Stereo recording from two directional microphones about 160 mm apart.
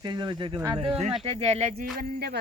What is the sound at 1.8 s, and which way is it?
Speech, 80° right.